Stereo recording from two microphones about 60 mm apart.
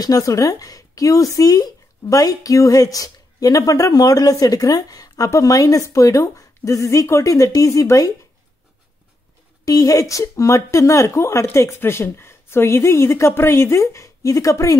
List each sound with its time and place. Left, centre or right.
0.0 s speech: left
9.7 s a woman's voice: left